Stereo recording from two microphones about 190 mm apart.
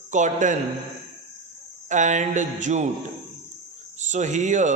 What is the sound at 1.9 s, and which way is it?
Speech, 40° right (ahead or behind).